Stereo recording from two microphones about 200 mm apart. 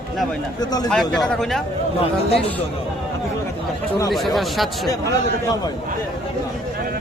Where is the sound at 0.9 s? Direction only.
Centre (ahead or behind).